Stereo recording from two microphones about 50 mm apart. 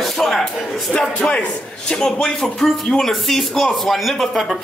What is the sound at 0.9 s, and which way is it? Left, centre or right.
A man's voice, centre.